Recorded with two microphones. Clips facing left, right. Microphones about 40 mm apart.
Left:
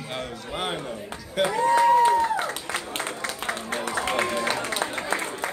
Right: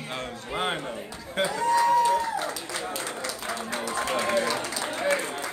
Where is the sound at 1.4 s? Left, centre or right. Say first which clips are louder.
Left 3 dB; left.